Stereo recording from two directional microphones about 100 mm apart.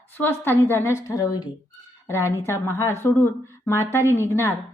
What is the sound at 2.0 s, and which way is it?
A woman's voice, 30° left (ahead or behind).